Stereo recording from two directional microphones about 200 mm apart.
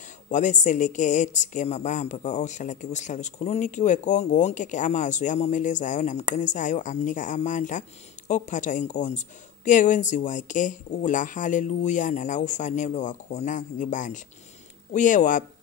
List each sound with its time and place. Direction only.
0.3 s speech: 40° left (ahead or behind)